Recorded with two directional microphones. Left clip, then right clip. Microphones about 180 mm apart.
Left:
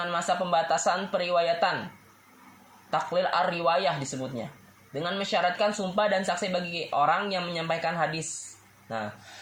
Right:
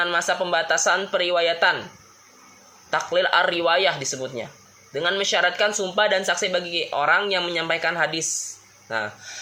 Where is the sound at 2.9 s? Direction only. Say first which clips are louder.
Right 6 dB; 30° right (ahead or behind).